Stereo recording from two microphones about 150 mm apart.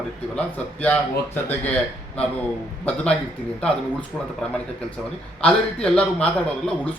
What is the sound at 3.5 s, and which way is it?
Speech, 5° left (ahead or behind).